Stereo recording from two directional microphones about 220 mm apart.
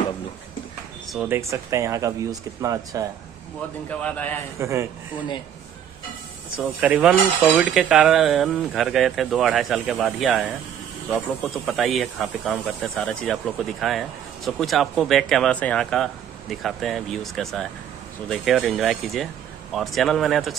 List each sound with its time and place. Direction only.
1.3 s speech: 15° right (ahead or behind)
4.0 s a man's voice: 5° left (ahead or behind)
4.6 s speech: 15° right (ahead or behind)
6.5 s speech: 5° right (ahead or behind)